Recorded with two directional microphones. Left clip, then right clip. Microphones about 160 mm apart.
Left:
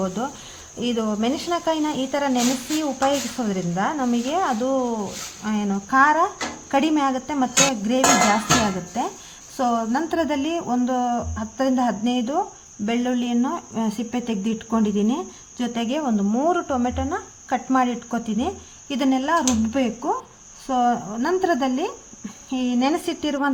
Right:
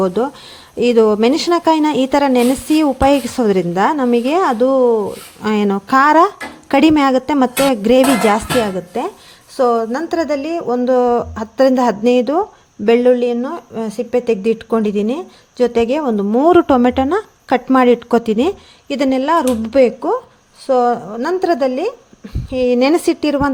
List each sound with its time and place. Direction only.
0.0 s speech: 50° right (ahead or behind)
5.4 s speech: 65° right (ahead or behind)
8.9 s speech: 45° right (ahead or behind)
16.5 s speech: 60° right (ahead or behind)